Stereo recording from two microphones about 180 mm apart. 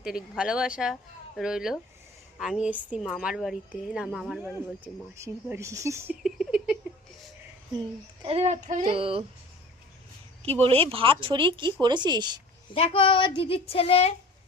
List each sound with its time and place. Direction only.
0.0 s a woman's voice: 5° right (ahead or behind)
6.2 s a sound: 5° right (ahead or behind)
8.2 s speech: 35° right (ahead or behind)
8.9 s speech: 30° right (ahead or behind)
10.6 s speech: 30° right (ahead or behind)
12.7 s speech: 30° left (ahead or behind)